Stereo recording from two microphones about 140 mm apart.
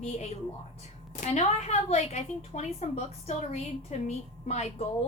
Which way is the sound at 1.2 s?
55° left (ahead or behind).